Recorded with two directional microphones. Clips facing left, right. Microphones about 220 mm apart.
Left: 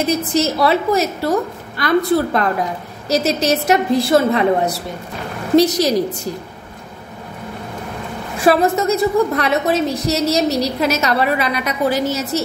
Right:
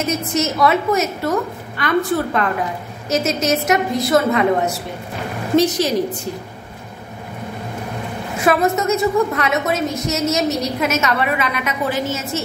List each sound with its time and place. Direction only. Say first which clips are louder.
0.0 s a woman's voice: left 3 dB; 35° left (ahead or behind)
8.4 s a woman's voice: left 2 dB; 30° left (ahead or behind)